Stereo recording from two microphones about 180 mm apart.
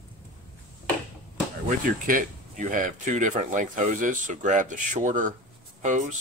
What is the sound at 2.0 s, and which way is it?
Speech, 50° right (ahead or behind).